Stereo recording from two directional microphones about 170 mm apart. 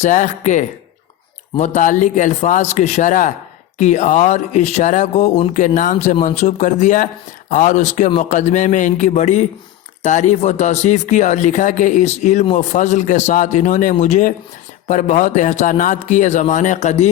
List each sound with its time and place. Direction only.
0.0 s speech: 45° left (ahead or behind)